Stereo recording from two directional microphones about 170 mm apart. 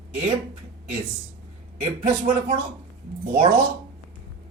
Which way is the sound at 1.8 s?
40° right (ahead or behind).